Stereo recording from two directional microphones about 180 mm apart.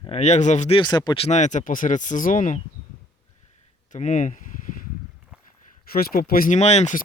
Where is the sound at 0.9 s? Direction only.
25° left (ahead or behind); by 2.6 s 45° left (ahead or behind).